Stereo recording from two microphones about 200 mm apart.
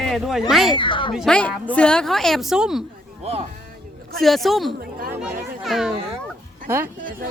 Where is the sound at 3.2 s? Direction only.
30° right (ahead or behind).